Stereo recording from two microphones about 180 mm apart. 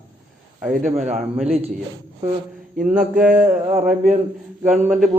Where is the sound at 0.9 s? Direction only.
40° right (ahead or behind).